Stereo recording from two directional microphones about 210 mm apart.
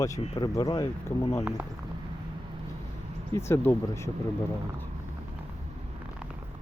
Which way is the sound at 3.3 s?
10° left (ahead or behind).